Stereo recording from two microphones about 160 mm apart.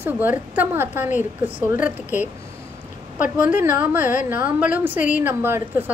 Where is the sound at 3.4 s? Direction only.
10° right (ahead or behind).